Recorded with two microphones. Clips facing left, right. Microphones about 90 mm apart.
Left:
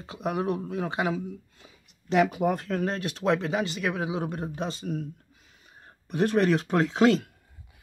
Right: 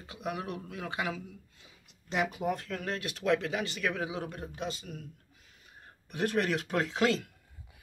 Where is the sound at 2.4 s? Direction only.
40° left (ahead or behind).